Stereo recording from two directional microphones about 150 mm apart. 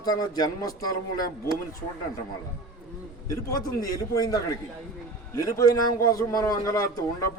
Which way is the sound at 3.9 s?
25° left (ahead or behind).